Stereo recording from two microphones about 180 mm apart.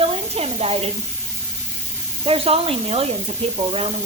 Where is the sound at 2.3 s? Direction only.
30° right (ahead or behind).